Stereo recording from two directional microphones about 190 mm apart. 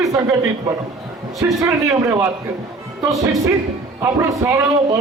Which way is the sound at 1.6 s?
15° right (ahead or behind).